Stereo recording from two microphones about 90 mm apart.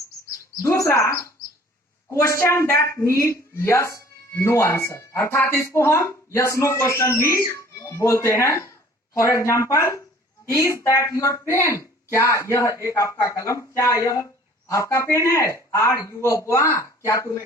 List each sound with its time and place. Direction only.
0.6 s a woman's voice: 35° left (ahead or behind)